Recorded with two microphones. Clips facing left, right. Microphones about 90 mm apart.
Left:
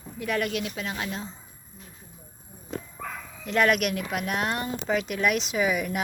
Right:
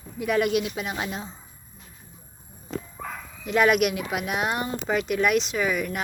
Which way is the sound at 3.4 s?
10° right (ahead or behind).